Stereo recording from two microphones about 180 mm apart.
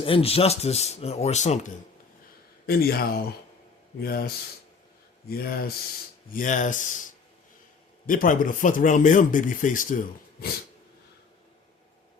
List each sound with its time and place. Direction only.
0.0 s speech: 30° left (ahead or behind)
2.6 s speech: 60° left (ahead or behind)
5.3 s speech: 55° left (ahead or behind)
6.3 s speech: 45° left (ahead or behind)
8.0 s speech: 50° left (ahead or behind)